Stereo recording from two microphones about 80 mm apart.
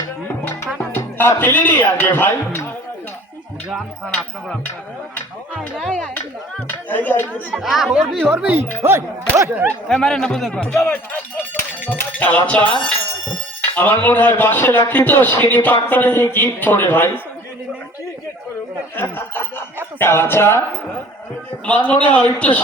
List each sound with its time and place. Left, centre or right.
0.9 s speech: left
6.7 s speech: left
7.5 s speech: centre
8.4 s speech: centre
8.8 s speech: right
9.9 s a man's voice: centre
10.8 s speech: left
18.9 s speech: left
21.8 s a man's voice: centre